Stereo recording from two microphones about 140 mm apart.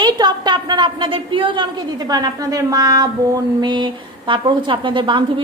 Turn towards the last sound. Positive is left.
turn(degrees=-35)  # may be behind; listen again after turning